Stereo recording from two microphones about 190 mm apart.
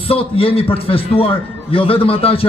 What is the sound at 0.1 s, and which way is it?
A man's voice, 30° left (ahead or behind).